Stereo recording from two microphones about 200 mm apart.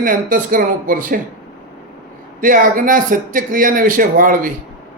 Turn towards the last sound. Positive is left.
turn(degrees=-45)  # may be behind; listen again after turning